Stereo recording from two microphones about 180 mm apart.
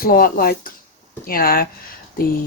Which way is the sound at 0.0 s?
55° left (ahead or behind).